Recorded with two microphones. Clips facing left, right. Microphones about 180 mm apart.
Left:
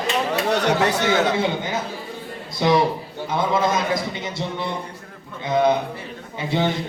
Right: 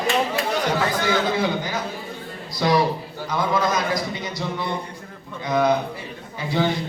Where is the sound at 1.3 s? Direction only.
25° left (ahead or behind).